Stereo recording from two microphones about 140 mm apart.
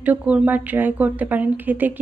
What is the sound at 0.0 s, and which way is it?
Speech, 10° right (ahead or behind).